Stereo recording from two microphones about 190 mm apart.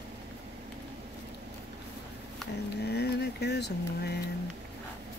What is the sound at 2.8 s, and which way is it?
Vehicle, 60° left (ahead or behind).